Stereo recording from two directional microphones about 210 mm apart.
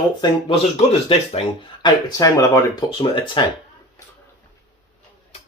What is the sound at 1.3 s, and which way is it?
Speech, 25° left (ahead or behind).